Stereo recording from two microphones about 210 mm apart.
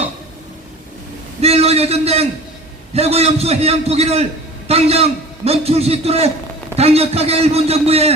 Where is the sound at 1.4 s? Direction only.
30° right (ahead or behind).